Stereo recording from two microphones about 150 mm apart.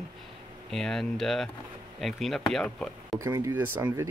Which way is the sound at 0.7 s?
5° left (ahead or behind).